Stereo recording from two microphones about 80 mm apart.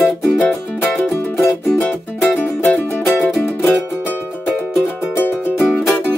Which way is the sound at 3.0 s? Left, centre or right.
Centre.